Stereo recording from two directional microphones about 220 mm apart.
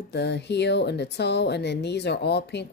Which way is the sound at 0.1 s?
50° left (ahead or behind).